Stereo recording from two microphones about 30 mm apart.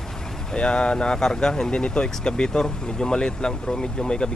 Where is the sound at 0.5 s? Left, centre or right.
Left.